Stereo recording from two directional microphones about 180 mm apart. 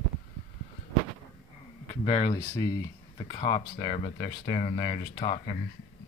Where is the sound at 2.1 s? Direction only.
20° left (ahead or behind).